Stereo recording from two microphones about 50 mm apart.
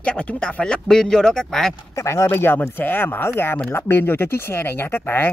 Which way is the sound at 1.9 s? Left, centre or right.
Left.